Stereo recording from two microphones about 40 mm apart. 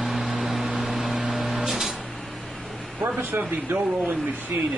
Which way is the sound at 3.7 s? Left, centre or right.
Right.